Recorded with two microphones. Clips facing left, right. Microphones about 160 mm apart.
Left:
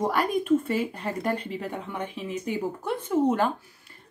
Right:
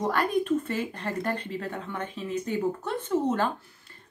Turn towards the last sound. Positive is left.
turn(degrees=10)  # may be behind; listen again after turning